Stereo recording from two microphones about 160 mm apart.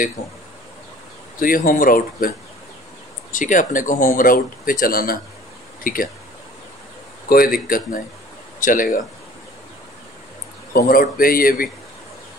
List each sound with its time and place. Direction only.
1.4 s speech: 65° left (ahead or behind)
3.3 s speech: 55° left (ahead or behind)
7.2 s speech: 65° left (ahead or behind)
10.7 s speech: 65° left (ahead or behind)